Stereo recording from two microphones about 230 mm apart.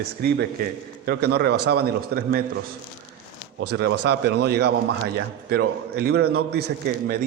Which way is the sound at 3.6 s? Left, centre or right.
Right.